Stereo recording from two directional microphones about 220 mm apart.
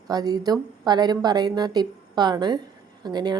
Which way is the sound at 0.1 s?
15° right (ahead or behind).